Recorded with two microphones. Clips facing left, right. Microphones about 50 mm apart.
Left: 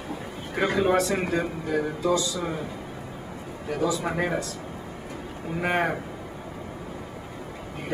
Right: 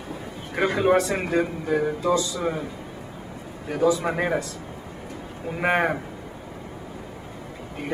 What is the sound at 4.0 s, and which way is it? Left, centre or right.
Speech, centre.